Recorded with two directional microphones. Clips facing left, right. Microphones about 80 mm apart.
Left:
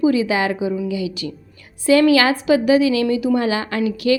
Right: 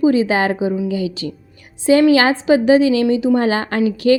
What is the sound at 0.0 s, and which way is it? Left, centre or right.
A woman's voice, right.